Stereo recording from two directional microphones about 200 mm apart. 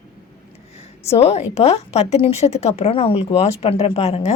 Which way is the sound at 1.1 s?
30° left (ahead or behind).